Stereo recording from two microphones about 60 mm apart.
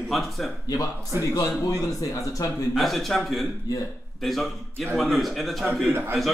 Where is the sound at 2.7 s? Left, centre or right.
Centre.